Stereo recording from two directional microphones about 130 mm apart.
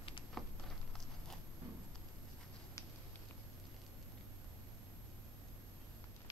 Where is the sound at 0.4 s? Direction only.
Centre (ahead or behind).